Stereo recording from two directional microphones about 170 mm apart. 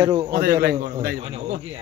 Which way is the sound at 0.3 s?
60° right (ahead or behind).